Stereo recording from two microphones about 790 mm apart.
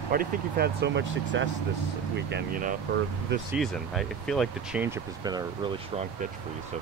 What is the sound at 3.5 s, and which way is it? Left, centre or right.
Speech, centre.